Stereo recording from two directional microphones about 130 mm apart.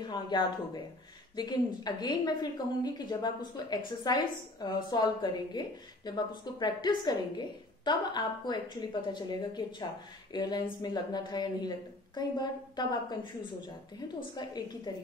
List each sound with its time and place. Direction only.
0.0 s a woman's voice: 35° left (ahead or behind)